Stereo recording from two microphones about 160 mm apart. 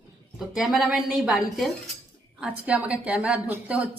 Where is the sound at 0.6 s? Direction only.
5° right (ahead or behind).